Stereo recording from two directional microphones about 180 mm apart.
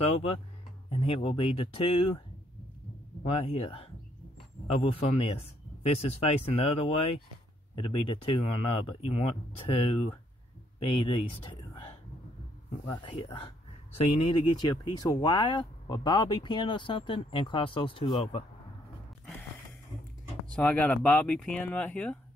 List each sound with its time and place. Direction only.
0.1 s speech: 35° left (ahead or behind)
3.3 s speech: 30° left (ahead or behind)
13.0 s speech: 30° left (ahead or behind)
20.5 s speech: 5° left (ahead or behind)